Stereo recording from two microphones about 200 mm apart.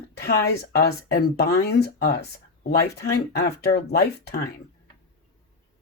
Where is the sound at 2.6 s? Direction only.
55° left (ahead or behind).